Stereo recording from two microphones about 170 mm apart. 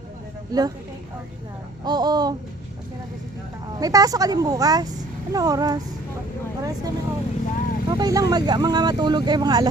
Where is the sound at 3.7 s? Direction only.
20° right (ahead or behind).